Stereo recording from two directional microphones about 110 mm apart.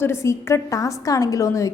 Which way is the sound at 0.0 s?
25° left (ahead or behind).